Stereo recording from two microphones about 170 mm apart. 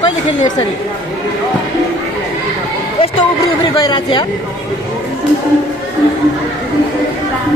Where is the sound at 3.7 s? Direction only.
25° left (ahead or behind).